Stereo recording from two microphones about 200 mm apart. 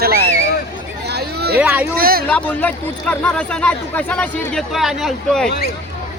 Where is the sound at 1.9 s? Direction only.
45° right (ahead or behind).